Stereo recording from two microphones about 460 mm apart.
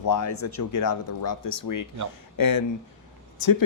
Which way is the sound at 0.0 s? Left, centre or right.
Left.